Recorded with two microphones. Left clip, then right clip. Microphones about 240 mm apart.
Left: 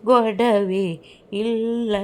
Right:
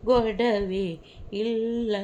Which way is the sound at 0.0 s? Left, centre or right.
Left.